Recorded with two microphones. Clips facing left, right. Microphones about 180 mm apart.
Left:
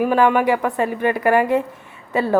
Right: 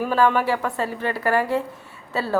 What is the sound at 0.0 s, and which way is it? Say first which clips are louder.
A woman's voice: left 4 dB; 15° left (ahead or behind).